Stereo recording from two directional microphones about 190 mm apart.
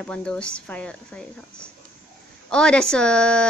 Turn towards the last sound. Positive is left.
turn(degrees=5)  # may be behind; listen again after turning